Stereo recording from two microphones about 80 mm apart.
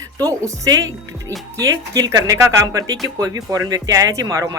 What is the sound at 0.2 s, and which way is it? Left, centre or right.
Speech, right.